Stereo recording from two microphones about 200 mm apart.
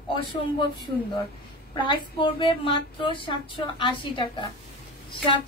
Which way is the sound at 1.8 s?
25° left (ahead or behind).